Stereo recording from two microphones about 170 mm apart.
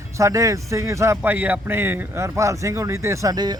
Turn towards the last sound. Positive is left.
turn(degrees=-25)  # may be behind; listen again after turning